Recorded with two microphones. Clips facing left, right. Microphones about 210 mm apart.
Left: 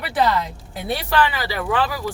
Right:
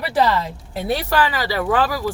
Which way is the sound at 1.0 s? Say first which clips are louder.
Right 1 dB; 45° right (ahead or behind).